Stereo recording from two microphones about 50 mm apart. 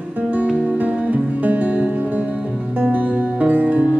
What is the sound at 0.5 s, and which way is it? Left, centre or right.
Music, right.